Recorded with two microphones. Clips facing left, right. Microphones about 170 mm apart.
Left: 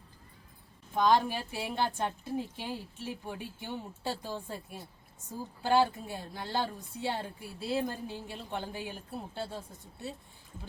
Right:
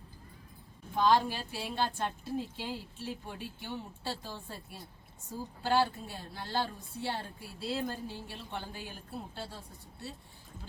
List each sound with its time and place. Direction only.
0.9 s a woman's voice: 15° left (ahead or behind)